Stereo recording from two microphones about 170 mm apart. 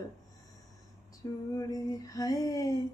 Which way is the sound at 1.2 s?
20° left (ahead or behind).